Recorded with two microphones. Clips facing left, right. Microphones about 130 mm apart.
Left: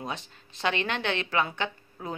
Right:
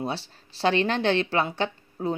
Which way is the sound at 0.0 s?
35° right (ahead or behind).